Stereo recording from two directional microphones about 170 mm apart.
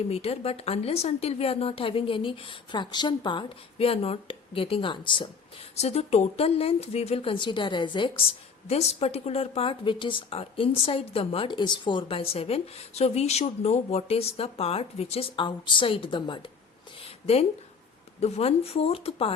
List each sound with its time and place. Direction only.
0.1 s speech: 35° left (ahead or behind)
5.7 s speech: 40° left (ahead or behind)
17.0 s a sound: 35° left (ahead or behind)
18.2 s speech: 40° left (ahead or behind)